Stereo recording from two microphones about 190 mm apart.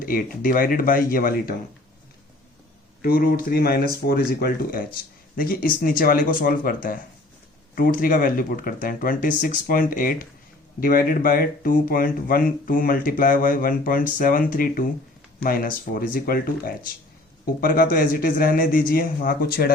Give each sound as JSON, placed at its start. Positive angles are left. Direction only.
{"t": 0.0, "sound": "speech", "side_deg": 50}
{"t": 3.0, "sound": "speech", "side_deg": 50}